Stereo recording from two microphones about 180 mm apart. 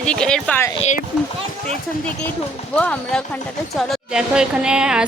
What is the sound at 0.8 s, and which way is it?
Speech, 40° left (ahead or behind).